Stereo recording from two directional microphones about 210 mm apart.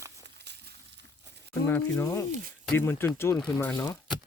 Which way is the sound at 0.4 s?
50° right (ahead or behind).